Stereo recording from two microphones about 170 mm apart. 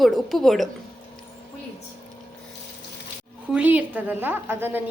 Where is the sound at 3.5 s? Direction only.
10° right (ahead or behind).